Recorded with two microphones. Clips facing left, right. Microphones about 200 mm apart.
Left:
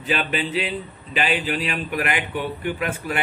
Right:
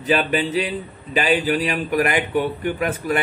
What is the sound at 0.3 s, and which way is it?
A man's voice, 40° right (ahead or behind).